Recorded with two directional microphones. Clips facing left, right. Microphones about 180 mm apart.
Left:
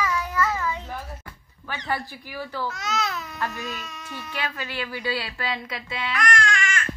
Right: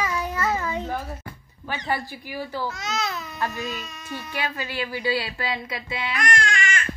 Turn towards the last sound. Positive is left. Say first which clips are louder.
# even
turn(degrees=-25)  # may be behind; listen again after turning